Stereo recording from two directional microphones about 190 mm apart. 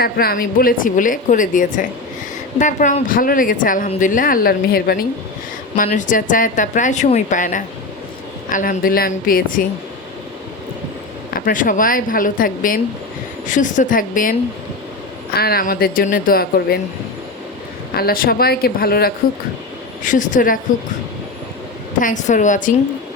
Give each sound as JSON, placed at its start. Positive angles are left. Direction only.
{"t": 0.0, "sound": "speech", "side_deg": 55}
{"t": 11.3, "sound": "speech", "side_deg": 45}
{"t": 17.9, "sound": "speech", "side_deg": 50}
{"t": 20.1, "sound": "speech", "side_deg": 40}
{"t": 22.0, "sound": "a woman's voice", "side_deg": 40}